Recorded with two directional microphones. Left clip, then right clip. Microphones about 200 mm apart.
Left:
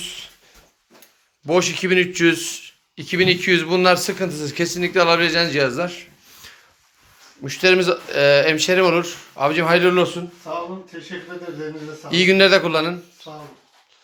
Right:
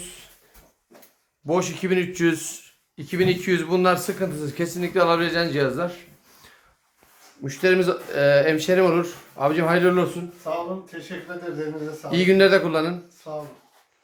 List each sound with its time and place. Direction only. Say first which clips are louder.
1.5 s speech: left 5 dB; 5° right (ahead or behind)
12.0 s speech: left 3 dB; 10° right (ahead or behind)